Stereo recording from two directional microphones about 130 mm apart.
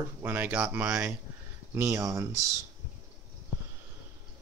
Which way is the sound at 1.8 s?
25° right (ahead or behind).